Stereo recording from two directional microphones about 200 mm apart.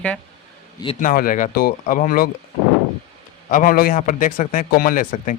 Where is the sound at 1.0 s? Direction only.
45° left (ahead or behind).